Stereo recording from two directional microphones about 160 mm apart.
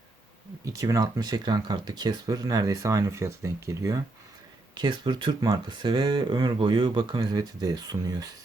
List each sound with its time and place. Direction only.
0.6 s speech: 20° right (ahead or behind)
4.7 s speech: 30° right (ahead or behind)